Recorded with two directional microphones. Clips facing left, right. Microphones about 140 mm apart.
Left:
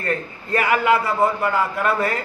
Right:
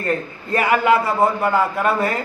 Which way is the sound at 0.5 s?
25° right (ahead or behind).